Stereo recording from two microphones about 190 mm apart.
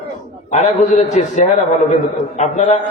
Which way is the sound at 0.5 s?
35° left (ahead or behind).